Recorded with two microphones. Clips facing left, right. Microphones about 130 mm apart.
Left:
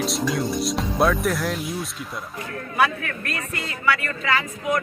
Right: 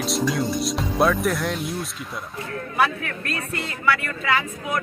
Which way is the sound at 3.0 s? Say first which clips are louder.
Right 1 dB; 20° right (ahead or behind).